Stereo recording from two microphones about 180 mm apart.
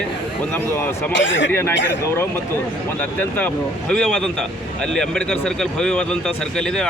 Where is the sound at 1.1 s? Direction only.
90° left.